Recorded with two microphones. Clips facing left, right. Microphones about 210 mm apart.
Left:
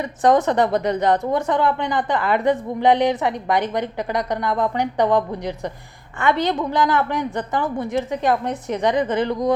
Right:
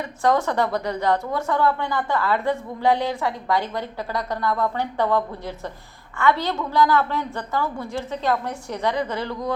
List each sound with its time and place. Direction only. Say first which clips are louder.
0.0 s a woman's voice: left 4 dB; 20° left (ahead or behind)